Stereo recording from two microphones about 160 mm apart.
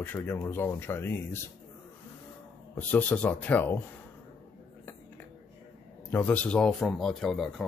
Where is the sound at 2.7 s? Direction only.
10° left (ahead or behind).